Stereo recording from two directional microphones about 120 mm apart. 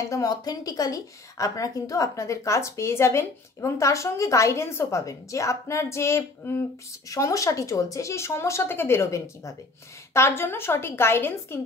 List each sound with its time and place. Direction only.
0.0 s speech: 25° left (ahead or behind)